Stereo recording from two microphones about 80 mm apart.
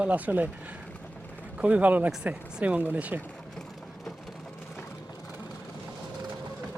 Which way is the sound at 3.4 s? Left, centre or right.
Centre.